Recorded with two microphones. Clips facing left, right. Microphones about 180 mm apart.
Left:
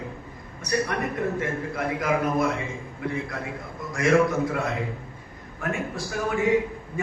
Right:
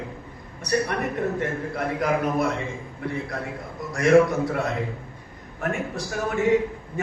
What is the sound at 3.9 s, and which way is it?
Speech, 35° right (ahead or behind).